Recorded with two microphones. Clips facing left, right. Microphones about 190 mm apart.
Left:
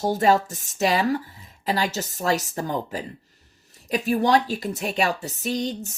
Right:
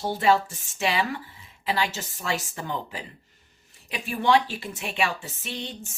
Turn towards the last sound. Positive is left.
turn(degrees=40)  # may be behind; listen again after turning